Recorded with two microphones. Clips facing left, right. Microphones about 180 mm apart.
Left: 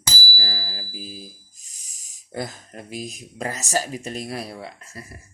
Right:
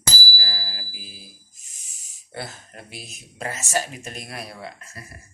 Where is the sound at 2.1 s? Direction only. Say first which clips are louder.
Left 4 dB; 40° left (ahead or behind).